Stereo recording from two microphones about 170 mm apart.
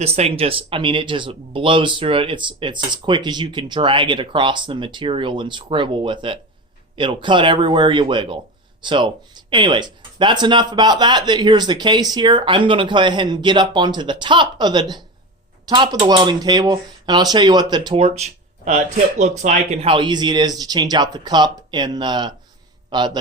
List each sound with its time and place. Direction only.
0.0 s a man's voice: 35° right (ahead or behind)